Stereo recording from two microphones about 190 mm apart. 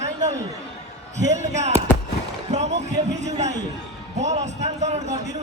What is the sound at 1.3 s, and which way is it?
Speech, 35° right (ahead or behind).